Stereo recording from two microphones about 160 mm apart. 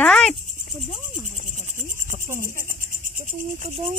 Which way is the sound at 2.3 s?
15° right (ahead or behind).